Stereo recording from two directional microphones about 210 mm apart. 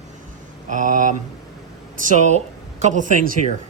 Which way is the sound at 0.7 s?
40° right (ahead or behind).